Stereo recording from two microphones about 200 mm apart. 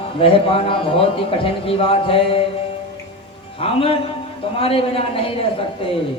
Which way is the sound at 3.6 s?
30° left (ahead or behind).